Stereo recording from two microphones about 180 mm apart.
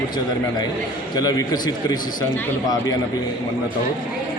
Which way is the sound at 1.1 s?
20° left (ahead or behind).